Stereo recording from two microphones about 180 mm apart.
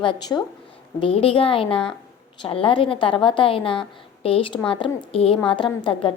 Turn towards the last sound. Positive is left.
turn(degrees=25)  # may be behind; listen again after turning